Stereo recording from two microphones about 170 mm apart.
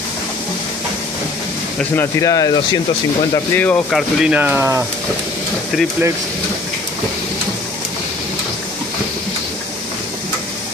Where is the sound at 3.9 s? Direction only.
5° right (ahead or behind).